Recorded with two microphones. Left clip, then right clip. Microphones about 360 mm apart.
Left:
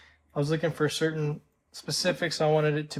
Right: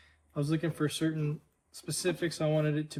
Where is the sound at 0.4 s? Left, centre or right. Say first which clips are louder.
Left 5 dB; centre.